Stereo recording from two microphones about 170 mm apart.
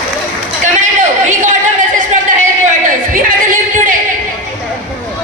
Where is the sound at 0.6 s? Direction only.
45° right (ahead or behind).